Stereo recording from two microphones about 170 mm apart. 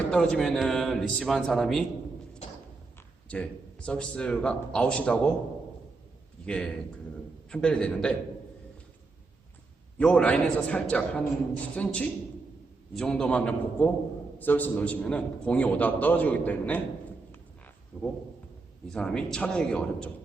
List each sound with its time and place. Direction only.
0.1 s a man's voice: 5° left (ahead or behind)
3.2 s a man's voice: 5° left (ahead or behind)
6.4 s a man's voice: 5° left (ahead or behind)
10.0 s a man's voice: 5° left (ahead or behind)
17.9 s a man's voice: 5° left (ahead or behind)